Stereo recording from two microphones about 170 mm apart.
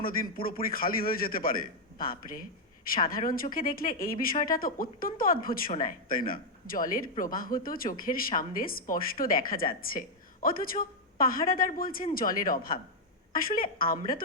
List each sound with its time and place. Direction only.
0.0 s speech: 60° left (ahead or behind)